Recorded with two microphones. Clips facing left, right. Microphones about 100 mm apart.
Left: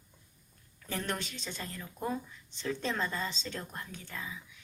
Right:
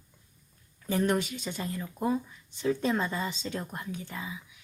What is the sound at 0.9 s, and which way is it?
Speech, 10° right (ahead or behind).